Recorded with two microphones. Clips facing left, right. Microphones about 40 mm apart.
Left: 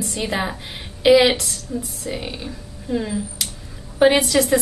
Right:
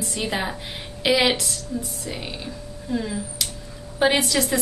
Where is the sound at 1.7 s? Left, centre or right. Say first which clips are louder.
Left 3 dB; left.